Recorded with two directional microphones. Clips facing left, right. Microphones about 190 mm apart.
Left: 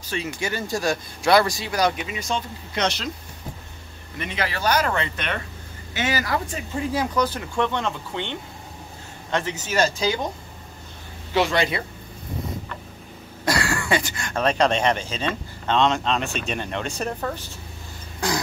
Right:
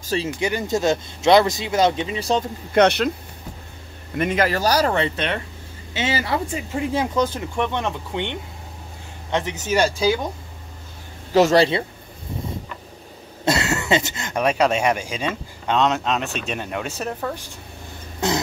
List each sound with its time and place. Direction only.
0.4 s speech: 20° right (ahead or behind); by 2.4 s 35° right (ahead or behind)
2.7 s speech: 60° right (ahead or behind)
4.2 s speech: 45° right (ahead or behind); by 10.1 s 10° right (ahead or behind)
11.3 s speech: 40° right (ahead or behind)
13.5 s speech: 20° right (ahead or behind); by 17.3 s 5° right (ahead or behind)
18.2 s speech: 25° right (ahead or behind)